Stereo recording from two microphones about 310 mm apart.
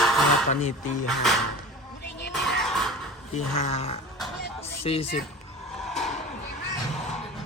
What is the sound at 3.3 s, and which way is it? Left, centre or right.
Speech, left.